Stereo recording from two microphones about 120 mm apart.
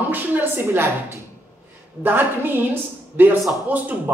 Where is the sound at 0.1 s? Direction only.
15° right (ahead or behind).